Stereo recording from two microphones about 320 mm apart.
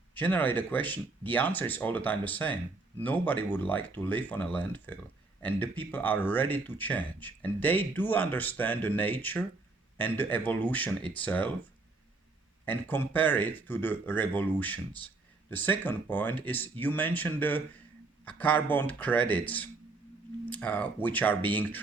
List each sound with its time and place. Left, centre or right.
0.1 s speech: centre
12.6 s speech: centre
20.5 s speech: centre